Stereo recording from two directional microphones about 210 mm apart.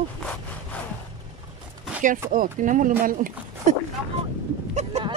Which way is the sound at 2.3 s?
40° right (ahead or behind).